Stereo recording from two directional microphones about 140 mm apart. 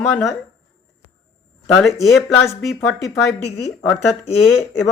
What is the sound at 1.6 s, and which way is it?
Speech, 5° left (ahead or behind).